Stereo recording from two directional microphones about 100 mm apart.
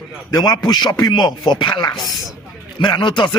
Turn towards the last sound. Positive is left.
turn(degrees=50)  # may be behind; listen again after turning